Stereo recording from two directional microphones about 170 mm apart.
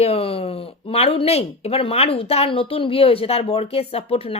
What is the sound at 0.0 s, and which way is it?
Speech, 35° left (ahead or behind).